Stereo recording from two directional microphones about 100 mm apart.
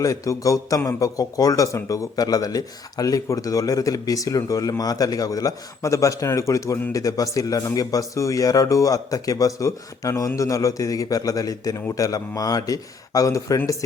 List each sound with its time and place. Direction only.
0.0 s a man's voice: 35° left (ahead or behind)